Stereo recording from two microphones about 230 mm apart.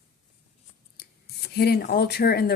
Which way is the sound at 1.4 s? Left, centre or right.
Left.